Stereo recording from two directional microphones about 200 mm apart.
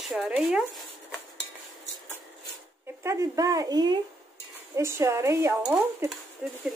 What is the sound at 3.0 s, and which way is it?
Speech, 15° right (ahead or behind).